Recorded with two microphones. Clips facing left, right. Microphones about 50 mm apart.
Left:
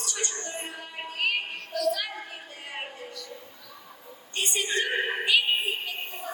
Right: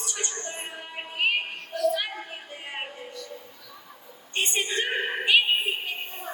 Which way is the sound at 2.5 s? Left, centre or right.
Right.